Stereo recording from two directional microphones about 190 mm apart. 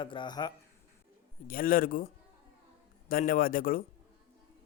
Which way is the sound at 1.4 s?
50° left (ahead or behind).